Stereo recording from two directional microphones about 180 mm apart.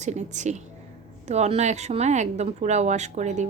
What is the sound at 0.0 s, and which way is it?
A woman's voice, 40° right (ahead or behind).